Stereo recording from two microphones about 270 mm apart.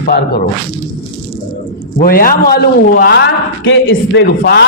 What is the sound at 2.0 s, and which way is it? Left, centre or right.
A man's voice, left.